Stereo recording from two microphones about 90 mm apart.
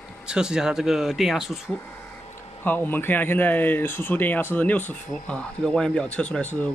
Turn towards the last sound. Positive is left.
turn(degrees=15)  # may be behind; listen again after turning